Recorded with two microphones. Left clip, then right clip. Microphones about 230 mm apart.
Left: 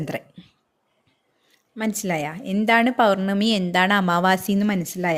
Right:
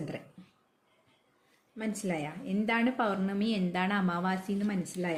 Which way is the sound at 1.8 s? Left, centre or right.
Left.